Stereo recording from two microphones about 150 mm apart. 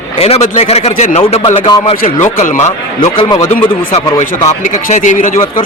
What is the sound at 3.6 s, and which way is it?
Speech, 35° left (ahead or behind).